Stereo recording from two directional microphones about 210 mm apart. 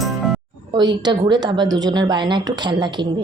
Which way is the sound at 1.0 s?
20° right (ahead or behind).